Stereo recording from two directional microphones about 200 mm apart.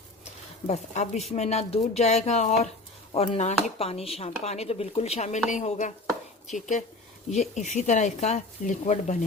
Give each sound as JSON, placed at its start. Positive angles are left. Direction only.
{"t": 0.7, "sound": "speech", "side_deg": 35}
{"t": 7.3, "sound": "speech", "side_deg": 35}